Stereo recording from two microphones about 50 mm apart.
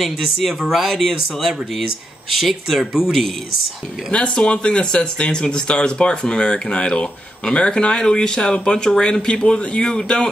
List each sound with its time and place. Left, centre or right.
0.0 s speech: centre
4.1 s speech: left